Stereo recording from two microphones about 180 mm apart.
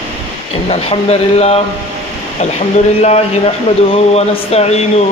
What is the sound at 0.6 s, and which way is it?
Speech, 35° left (ahead or behind).